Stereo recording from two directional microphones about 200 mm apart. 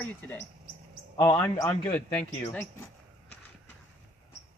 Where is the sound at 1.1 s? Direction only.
20° left (ahead or behind).